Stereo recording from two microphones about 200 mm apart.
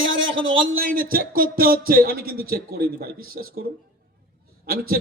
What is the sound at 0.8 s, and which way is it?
A man's voice, 45° right (ahead or behind).